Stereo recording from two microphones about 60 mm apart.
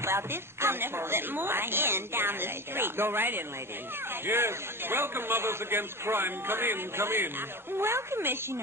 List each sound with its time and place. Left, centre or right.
0.0 s a woman's voice: right